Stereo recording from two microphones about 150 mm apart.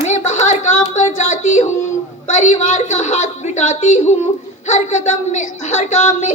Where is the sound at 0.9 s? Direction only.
55° left (ahead or behind).